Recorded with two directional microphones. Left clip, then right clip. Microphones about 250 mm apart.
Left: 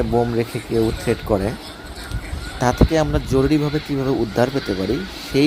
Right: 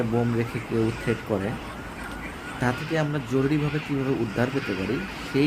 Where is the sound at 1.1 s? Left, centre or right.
Left.